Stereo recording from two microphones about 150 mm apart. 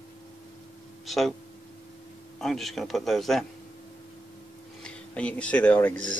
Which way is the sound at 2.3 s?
Centre (ahead or behind).